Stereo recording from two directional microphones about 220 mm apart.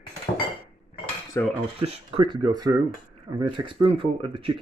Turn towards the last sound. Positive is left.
turn(degrees=-20)  # may be behind; listen again after turning